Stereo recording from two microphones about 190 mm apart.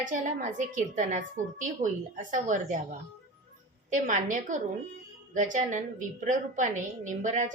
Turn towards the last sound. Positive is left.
turn(degrees=-40)  # may be behind; listen again after turning